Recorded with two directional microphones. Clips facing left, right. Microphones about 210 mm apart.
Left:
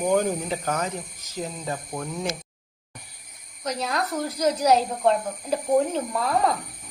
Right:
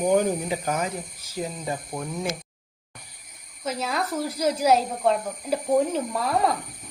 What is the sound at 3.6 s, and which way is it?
Speech, 5° right (ahead or behind).